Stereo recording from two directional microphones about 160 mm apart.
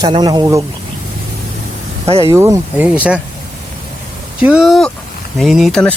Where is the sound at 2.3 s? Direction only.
20° right (ahead or behind).